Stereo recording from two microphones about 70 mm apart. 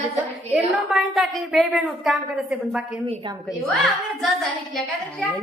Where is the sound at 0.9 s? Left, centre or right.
Centre.